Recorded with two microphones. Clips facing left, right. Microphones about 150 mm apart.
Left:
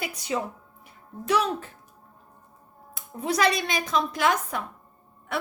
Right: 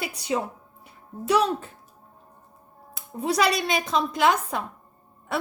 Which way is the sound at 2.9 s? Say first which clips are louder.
Right 2 dB; 30° right (ahead or behind).